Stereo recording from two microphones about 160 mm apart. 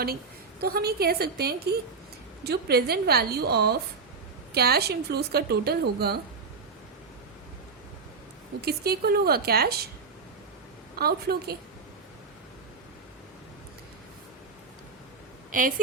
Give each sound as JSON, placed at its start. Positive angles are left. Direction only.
{"t": 0.6, "sound": "a woman's voice", "side_deg": -75}
{"t": 8.6, "sound": "speech", "side_deg": -75}
{"t": 10.9, "sound": "speech", "side_deg": -75}
{"t": 15.5, "sound": "a woman's voice", "side_deg": -55}